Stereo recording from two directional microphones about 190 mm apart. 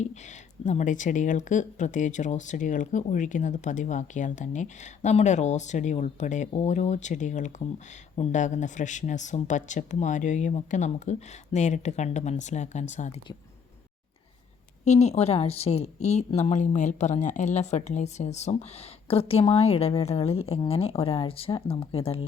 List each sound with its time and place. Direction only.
0.0 s speech: 40° left (ahead or behind)
14.8 s speech: 35° left (ahead or behind)